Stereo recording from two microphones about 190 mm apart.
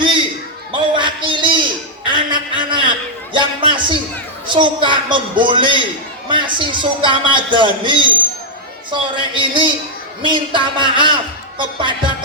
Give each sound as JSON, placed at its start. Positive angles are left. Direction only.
{"t": 0.0, "sound": "basketball bounce", "side_deg": -25}
{"t": 0.8, "sound": "a sound", "side_deg": -25}
{"t": 3.3, "sound": "a man's voice", "side_deg": -25}